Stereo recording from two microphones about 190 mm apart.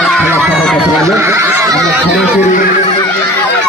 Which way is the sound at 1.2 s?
15° right (ahead or behind).